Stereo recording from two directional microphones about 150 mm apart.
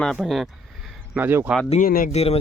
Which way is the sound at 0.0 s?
Centre (ahead or behind).